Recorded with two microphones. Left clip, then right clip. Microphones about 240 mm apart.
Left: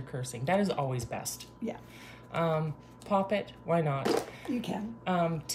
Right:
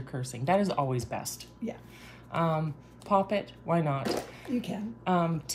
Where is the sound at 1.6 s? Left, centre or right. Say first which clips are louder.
Even; centre.